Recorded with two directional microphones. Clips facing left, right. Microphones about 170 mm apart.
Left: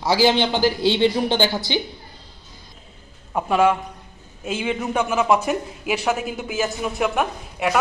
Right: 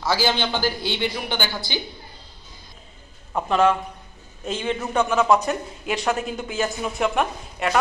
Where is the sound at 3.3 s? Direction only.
10° left (ahead or behind).